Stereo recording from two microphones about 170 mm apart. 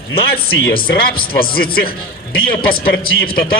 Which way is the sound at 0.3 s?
65° left (ahead or behind).